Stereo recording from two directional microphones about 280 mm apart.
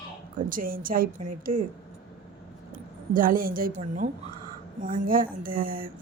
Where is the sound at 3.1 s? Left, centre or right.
Right.